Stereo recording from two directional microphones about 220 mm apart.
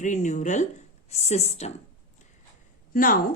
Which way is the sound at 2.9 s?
40° left (ahead or behind).